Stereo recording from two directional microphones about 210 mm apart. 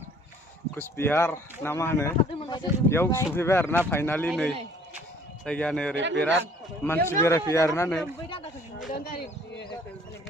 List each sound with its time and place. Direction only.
0.7 s speech: 10° left (ahead or behind)
8.9 s speech: 45° left (ahead or behind)